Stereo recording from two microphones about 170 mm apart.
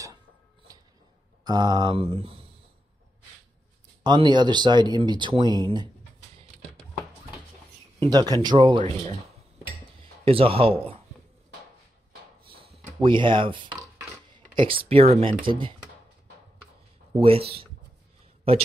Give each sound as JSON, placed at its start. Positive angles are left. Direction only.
{"t": 0.7, "sound": "a sound", "side_deg": -20}
{"t": 1.4, "sound": "speech", "side_deg": -25}
{"t": 4.0, "sound": "speech", "side_deg": -25}
{"t": 8.0, "sound": "speech", "side_deg": -25}
{"t": 10.2, "sound": "speech", "side_deg": -35}
{"t": 13.0, "sound": "speech", "side_deg": -30}
{"t": 17.2, "sound": "speech", "side_deg": -35}